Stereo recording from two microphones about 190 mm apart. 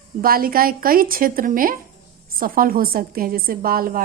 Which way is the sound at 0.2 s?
50° right (ahead or behind).